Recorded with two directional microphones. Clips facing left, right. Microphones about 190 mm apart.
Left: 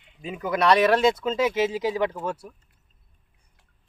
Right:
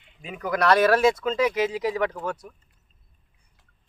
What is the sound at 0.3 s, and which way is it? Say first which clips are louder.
Speech: left 1 dB; 25° left (ahead or behind).